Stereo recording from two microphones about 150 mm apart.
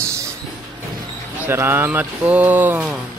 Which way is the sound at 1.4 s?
15° right (ahead or behind).